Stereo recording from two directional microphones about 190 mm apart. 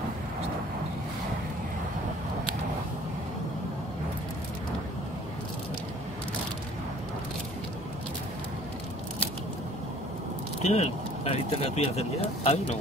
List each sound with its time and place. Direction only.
10.6 s speech: 35° left (ahead or behind)